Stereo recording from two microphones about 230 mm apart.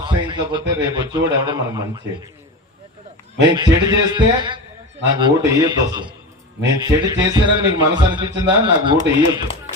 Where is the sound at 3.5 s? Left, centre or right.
Centre.